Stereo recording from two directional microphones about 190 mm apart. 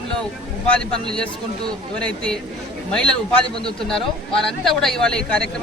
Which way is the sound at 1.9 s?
5° left (ahead or behind).